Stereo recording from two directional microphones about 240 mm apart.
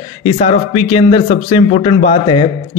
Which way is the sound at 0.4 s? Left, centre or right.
Left.